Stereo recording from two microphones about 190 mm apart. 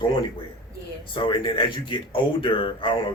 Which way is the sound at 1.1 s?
25° left (ahead or behind).